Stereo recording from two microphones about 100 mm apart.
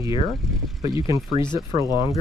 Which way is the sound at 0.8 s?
35° right (ahead or behind).